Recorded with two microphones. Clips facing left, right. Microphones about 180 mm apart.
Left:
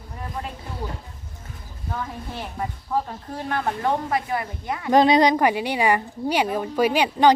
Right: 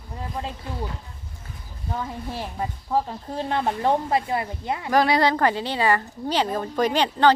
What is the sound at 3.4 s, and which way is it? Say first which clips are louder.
Speech: right 2 dB; 25° right (ahead or behind).